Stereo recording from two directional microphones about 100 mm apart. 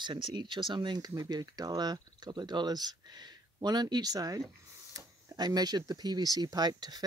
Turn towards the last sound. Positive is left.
turn(degrees=-40)  # may be behind; listen again after turning